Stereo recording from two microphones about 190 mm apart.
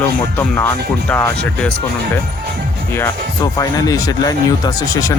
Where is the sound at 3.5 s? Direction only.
20° left (ahead or behind).